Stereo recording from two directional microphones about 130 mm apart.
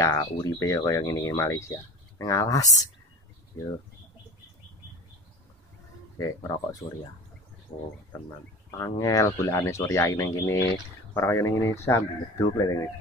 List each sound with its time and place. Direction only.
0.0 s speech: 30° left (ahead or behind)
6.1 s speech: 25° left (ahead or behind)
7.7 s speech: 35° left (ahead or behind)
8.7 s speech: 25° left (ahead or behind)